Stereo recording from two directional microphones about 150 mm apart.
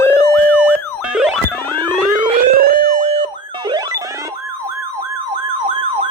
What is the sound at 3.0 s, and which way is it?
Siren, 35° right (ahead or behind).